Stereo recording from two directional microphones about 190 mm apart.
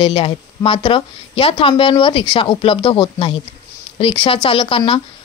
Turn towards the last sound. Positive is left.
turn(degrees=30)  # may be behind; listen again after turning